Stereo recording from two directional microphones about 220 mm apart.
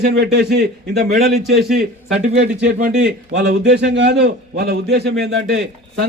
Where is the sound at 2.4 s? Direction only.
50° right (ahead or behind).